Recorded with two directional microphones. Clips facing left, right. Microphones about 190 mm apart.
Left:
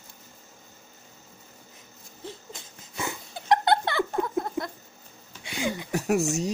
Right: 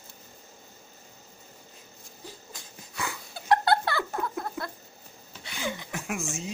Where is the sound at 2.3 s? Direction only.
25° left (ahead or behind).